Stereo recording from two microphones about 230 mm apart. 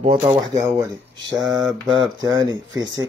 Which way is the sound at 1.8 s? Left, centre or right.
Centre.